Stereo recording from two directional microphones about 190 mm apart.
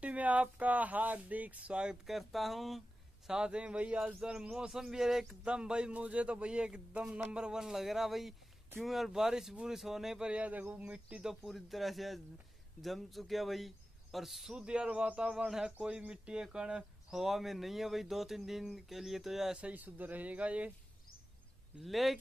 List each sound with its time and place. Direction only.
0.0 s speech: 5° right (ahead or behind)
21.7 s speech: centre (ahead or behind)